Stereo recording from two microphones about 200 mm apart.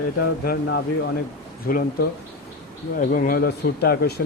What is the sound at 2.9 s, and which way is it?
Speech, 45° left (ahead or behind).